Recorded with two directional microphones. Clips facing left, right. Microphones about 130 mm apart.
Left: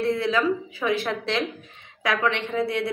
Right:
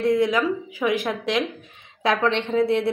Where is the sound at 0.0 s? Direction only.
15° right (ahead or behind).